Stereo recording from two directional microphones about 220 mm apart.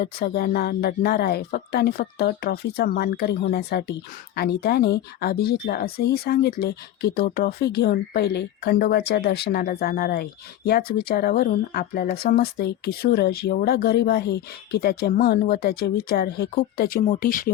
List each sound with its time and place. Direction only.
0.0 s speech: 45° left (ahead or behind)